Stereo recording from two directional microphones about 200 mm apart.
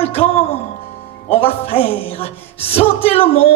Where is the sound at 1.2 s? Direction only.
30° left (ahead or behind).